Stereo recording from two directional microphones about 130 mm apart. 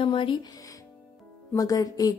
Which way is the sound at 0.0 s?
40° left (ahead or behind).